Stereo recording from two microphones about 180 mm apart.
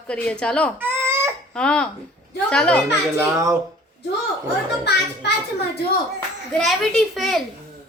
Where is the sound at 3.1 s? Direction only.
15° right (ahead or behind).